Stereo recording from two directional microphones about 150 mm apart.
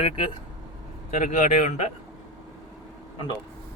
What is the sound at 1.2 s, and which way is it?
Speech, 55° left (ahead or behind).